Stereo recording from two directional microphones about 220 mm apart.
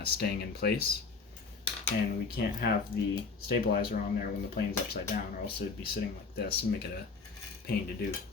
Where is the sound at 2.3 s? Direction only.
45° left (ahead or behind).